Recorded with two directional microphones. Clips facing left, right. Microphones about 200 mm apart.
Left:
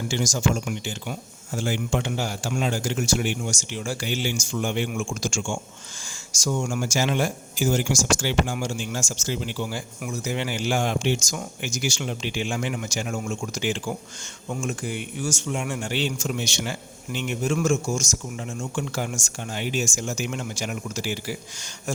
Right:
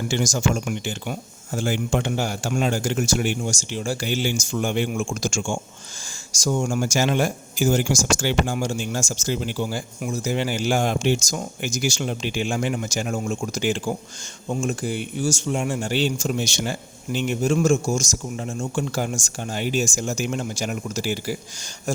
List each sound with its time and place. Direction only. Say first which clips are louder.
0.1 s a man's voice: right 1 dB; 55° right (ahead or behind)